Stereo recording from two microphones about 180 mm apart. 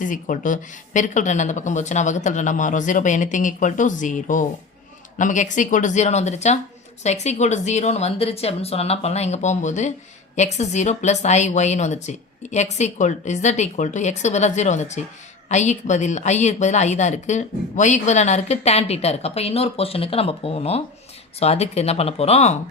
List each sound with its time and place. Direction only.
0.0 s a woman's voice: 45° left (ahead or behind)